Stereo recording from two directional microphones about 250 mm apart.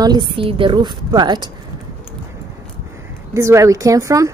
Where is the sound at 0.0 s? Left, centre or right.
Centre.